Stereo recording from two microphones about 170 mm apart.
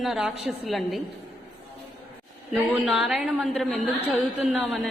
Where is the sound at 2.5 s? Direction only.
Centre (ahead or behind).